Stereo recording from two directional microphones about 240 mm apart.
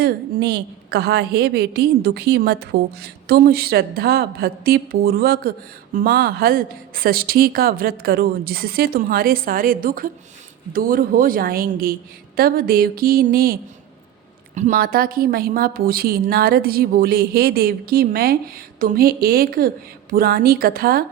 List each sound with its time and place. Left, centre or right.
0.0 s a woman's voice: right